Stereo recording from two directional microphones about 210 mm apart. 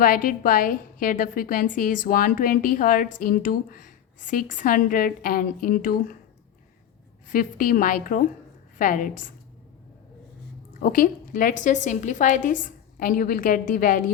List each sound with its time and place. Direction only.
0.0 s a woman's voice: 40° left (ahead or behind)
7.3 s a woman's voice: 40° left (ahead or behind)
10.8 s a woman's voice: 40° left (ahead or behind)